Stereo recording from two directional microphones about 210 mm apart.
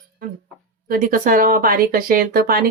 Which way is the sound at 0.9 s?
40° right (ahead or behind).